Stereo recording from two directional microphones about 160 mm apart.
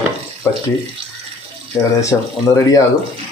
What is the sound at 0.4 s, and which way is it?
Speech, 15° left (ahead or behind).